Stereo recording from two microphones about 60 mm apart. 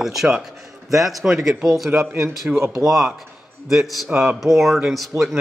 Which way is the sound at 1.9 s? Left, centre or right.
Right.